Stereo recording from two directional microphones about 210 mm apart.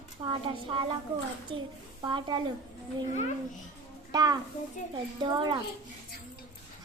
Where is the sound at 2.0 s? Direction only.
20° right (ahead or behind).